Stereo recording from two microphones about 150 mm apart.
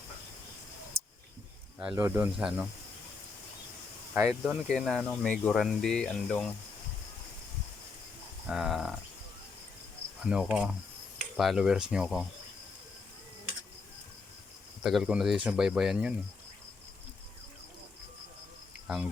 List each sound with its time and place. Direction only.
0.9 s a sound: 45° right (ahead or behind)
1.8 s speech: 5° right (ahead or behind)
4.3 s speech: centre (ahead or behind)
8.4 s speech: centre (ahead or behind)
10.2 s speech: 5° right (ahead or behind)
14.8 s speech: 5° right (ahead or behind)